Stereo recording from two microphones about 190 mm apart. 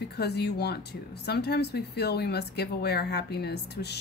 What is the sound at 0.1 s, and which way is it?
A woman's voice, 60° left (ahead or behind).